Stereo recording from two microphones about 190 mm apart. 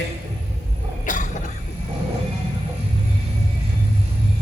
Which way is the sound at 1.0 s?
40° left (ahead or behind).